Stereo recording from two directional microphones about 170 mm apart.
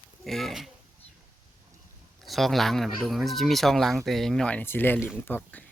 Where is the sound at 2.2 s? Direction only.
Centre (ahead or behind).